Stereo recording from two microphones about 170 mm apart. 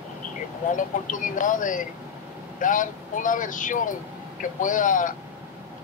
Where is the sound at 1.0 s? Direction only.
50° left (ahead or behind).